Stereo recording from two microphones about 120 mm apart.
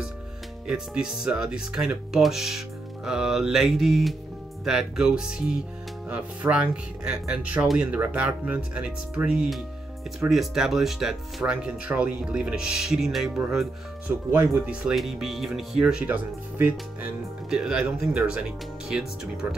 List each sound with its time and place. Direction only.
0.7 s speech: 5° right (ahead or behind)
14.3 s speech: 20° right (ahead or behind)
14.7 s speech: 5° right (ahead or behind)